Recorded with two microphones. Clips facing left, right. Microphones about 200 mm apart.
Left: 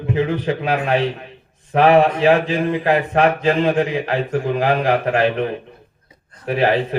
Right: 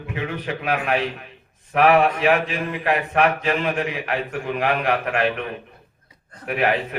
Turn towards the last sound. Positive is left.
turn(degrees=30)  # may be behind; listen again after turning